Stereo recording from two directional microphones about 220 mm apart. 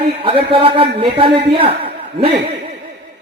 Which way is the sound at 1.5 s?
25° right (ahead or behind).